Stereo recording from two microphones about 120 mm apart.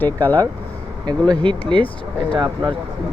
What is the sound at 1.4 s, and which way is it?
Speech, 40° right (ahead or behind).